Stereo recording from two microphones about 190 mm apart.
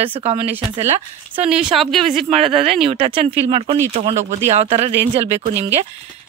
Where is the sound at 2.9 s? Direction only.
25° right (ahead or behind).